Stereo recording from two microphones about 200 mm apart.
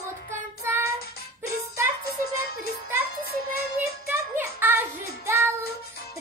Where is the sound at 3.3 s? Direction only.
50° left (ahead or behind).